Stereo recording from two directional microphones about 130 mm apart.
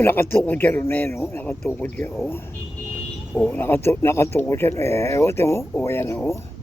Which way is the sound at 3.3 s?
10° left (ahead or behind).